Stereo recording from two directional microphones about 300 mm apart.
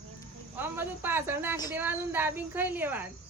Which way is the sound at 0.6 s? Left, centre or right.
Centre.